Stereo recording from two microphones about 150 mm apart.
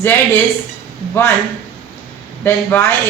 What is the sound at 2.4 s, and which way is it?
Speech, 15° left (ahead or behind).